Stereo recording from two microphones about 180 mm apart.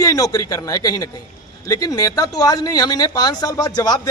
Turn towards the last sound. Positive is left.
turn(degrees=20)  # may be behind; listen again after turning